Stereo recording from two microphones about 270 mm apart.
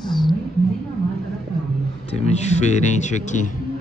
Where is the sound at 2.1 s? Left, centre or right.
Left.